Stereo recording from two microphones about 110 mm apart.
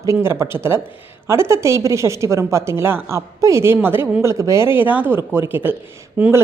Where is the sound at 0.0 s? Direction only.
25° right (ahead or behind).